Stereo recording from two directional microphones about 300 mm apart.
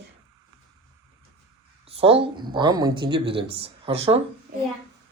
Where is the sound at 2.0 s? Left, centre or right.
Centre.